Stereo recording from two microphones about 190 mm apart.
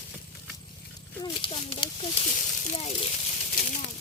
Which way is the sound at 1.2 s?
25° left (ahead or behind).